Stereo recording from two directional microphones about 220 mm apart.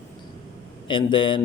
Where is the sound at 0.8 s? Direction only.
20° left (ahead or behind).